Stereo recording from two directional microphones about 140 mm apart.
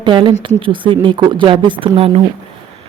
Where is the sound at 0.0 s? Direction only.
35° right (ahead or behind).